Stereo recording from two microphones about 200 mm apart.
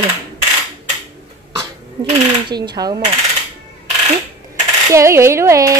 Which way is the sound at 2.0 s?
20° right (ahead or behind).